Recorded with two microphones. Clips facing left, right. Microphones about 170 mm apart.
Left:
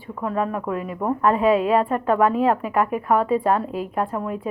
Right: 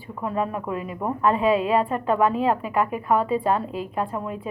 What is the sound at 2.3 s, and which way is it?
A woman's voice, centre (ahead or behind).